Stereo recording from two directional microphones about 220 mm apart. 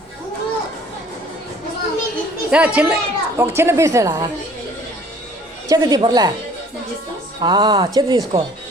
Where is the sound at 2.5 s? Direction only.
5° right (ahead or behind).